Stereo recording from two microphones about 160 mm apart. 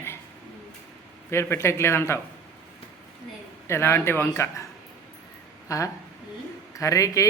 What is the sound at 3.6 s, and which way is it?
A man's voice, 15° left (ahead or behind).